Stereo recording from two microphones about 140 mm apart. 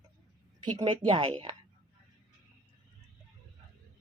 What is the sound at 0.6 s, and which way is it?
Speech, 35° right (ahead or behind).